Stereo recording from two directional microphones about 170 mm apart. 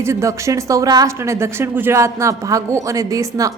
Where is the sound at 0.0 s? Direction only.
15° right (ahead or behind).